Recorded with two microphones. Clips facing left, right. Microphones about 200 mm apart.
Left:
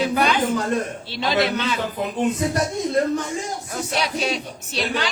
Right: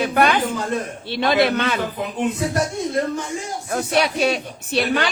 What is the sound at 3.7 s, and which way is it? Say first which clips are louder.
A man's voice: right 6 dB; 55° right (ahead or behind).